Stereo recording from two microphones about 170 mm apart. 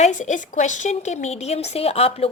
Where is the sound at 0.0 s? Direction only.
45° left (ahead or behind).